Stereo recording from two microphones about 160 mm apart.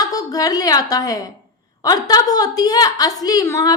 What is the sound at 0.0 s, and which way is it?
A woman's voice, 20° left (ahead or behind).